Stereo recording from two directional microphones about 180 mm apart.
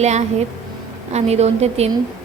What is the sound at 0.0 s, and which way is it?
A woman's voice, 40° right (ahead or behind).